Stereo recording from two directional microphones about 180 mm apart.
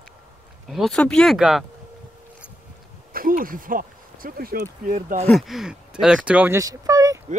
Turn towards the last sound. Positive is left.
turn(degrees=-20)  # may be behind; listen again after turning